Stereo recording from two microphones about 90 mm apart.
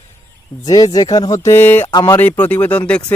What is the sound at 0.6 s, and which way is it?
Speech, 45° left (ahead or behind).